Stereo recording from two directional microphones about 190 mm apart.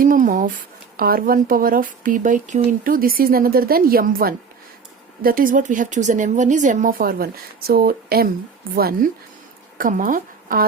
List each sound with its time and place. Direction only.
0.0 s speech: 45° right (ahead or behind)